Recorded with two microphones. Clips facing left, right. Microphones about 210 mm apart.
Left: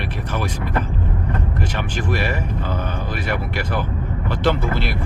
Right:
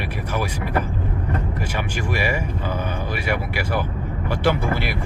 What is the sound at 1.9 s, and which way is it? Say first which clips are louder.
Speech: left 1 dB; 10° right (ahead or behind).